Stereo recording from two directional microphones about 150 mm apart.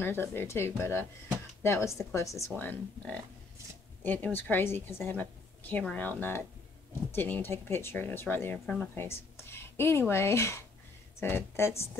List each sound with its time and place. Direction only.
0.0 s a woman's voice: 15° left (ahead or behind)